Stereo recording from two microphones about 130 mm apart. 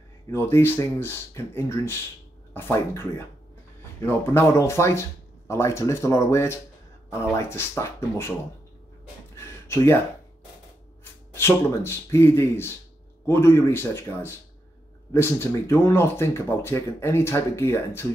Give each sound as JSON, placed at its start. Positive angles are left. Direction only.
{"t": 0.3, "sound": "speech", "side_deg": 20}
{"t": 9.4, "sound": "a sound", "side_deg": 20}
{"t": 11.3, "sound": "speech", "side_deg": 20}